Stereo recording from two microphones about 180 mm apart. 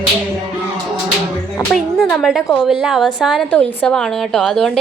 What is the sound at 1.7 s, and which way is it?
A woman's voice, centre (ahead or behind).